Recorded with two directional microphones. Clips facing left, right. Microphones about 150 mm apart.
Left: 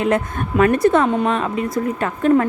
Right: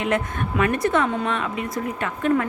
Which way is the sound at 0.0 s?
35° left (ahead or behind).